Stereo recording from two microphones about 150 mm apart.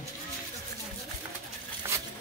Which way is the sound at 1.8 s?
15° right (ahead or behind).